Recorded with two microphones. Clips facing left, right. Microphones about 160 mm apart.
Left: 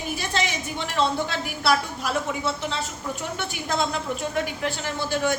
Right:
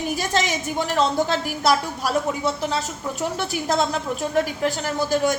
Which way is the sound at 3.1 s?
40° right (ahead or behind).